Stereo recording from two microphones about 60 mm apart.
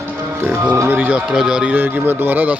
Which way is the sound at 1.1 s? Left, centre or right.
Centre.